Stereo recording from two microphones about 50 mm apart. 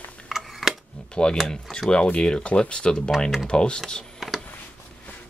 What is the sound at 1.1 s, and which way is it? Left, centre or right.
Speech, centre.